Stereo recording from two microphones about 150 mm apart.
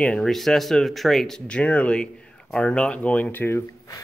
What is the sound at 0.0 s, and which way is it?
Speech, 5° left (ahead or behind).